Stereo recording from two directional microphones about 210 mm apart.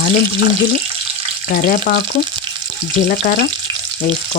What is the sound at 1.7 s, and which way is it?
Speech, 40° left (ahead or behind).